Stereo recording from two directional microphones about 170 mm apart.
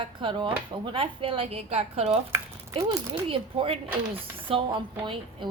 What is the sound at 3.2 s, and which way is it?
Speech, 30° right (ahead or behind).